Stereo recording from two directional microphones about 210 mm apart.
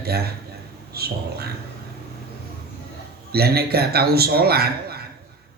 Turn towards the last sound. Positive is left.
turn(degrees=-45)  # may be behind; listen again after turning